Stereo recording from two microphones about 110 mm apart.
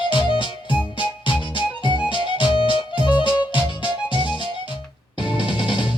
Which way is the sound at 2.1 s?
45° left (ahead or behind).